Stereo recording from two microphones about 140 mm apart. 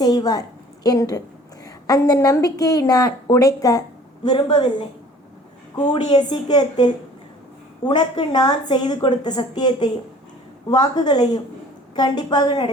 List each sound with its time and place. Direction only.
0.0 s a woman's voice: 30° left (ahead or behind)
6.1 s a woman's voice: 30° left (ahead or behind)